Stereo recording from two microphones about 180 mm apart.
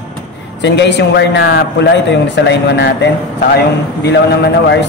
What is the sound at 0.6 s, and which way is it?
A man's voice, 75° left (ahead or behind).